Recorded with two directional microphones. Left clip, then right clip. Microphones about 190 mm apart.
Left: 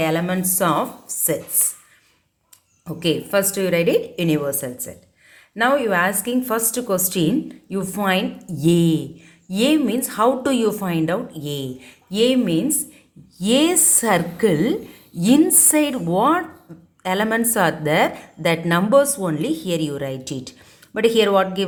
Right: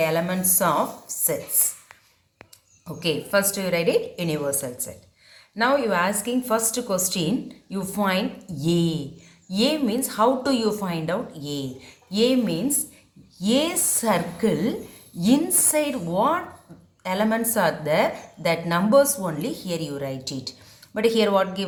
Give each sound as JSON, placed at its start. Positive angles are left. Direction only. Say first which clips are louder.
{"t": 0.0, "sound": "a woman's voice", "louder": "left 2 dB", "side_deg": 45}
{"t": 2.8, "sound": "a woman's voice", "louder": "left 4 dB", "side_deg": 45}